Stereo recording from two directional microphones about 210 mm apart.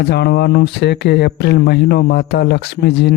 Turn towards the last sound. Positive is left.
turn(degrees=50)  # may be behind; listen again after turning